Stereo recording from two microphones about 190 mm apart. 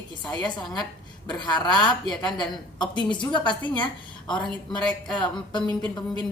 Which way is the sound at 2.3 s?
25° left (ahead or behind).